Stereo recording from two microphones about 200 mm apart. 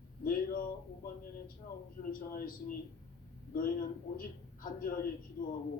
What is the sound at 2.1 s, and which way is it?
A man's voice, 45° left (ahead or behind).